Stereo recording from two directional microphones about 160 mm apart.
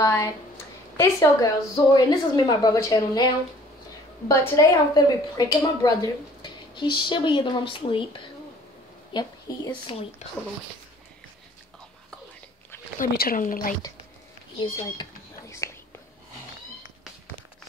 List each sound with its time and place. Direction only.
0.0 s a woman's voice: 20° left (ahead or behind)
4.3 s speech: 20° left (ahead or behind)
9.1 s speech: 30° left (ahead or behind)
13.0 s speech: 60° left (ahead or behind)
14.6 s a sound: 25° left (ahead or behind)